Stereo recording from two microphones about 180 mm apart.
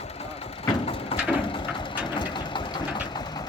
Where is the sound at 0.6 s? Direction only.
30° left (ahead or behind).